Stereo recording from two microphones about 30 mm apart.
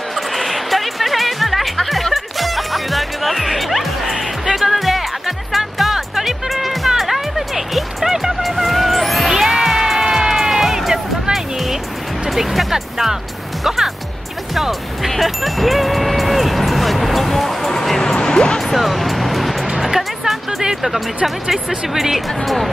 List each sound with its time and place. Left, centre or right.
0.1 s music: centre
9.3 s music: centre
14.5 s music: centre
18.0 s music: left
18.6 s music: centre
21.5 s speech: centre